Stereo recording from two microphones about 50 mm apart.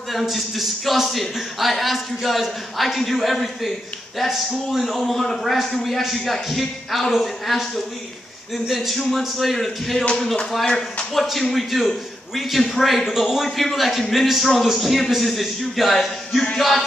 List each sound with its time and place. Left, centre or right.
0.1 s a man's voice: centre
10.6 s speech: centre
11.1 s a man's voice: centre